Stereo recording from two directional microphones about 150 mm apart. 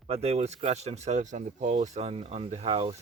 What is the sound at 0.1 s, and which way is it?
Speech, 45° right (ahead or behind).